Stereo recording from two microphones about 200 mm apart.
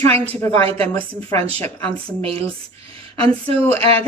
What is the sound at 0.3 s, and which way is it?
Speech, 15° left (ahead or behind).